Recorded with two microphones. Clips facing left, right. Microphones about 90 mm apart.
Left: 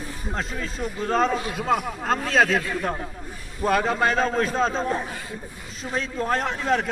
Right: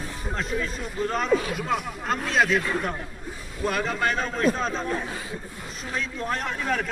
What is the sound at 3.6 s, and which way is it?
A man's voice, 35° left (ahead or behind).